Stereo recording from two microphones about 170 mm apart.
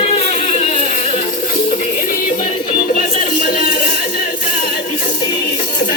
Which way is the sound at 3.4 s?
65° left (ahead or behind).